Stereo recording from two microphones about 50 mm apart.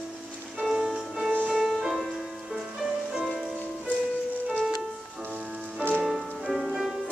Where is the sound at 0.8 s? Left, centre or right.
Centre.